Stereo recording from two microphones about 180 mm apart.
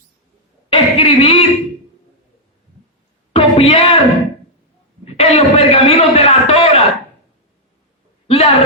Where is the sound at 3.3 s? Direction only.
30° left (ahead or behind).